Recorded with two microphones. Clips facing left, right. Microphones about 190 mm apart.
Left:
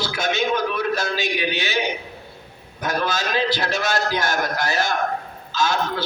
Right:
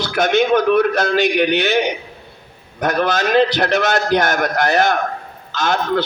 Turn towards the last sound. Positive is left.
turn(degrees=-55)  # may be behind; listen again after turning